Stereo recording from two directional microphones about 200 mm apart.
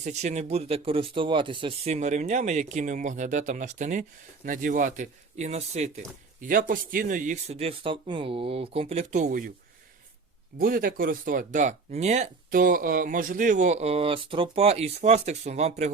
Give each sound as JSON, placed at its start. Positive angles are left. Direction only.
{"t": 0.0, "sound": "speech", "side_deg": -35}
{"t": 10.6, "sound": "speech", "side_deg": -45}